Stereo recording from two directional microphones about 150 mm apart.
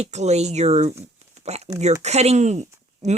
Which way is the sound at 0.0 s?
50° right (ahead or behind).